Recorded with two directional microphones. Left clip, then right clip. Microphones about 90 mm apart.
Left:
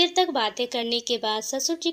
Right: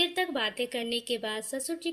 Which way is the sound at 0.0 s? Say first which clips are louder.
Left 7 dB; 45° left (ahead or behind).